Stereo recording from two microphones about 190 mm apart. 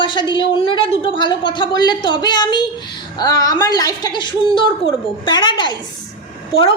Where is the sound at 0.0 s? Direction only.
25° left (ahead or behind).